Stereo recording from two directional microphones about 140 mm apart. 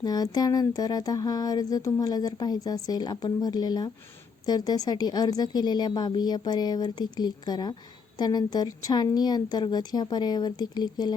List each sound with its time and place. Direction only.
0.0 s speech: 30° left (ahead or behind)